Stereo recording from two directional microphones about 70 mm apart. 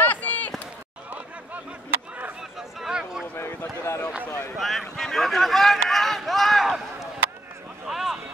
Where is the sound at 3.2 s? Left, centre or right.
Left.